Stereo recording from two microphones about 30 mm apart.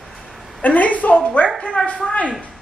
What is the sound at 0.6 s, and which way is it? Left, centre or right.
Speech, left.